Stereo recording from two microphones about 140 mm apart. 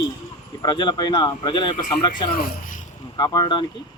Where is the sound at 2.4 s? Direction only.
70° left (ahead or behind).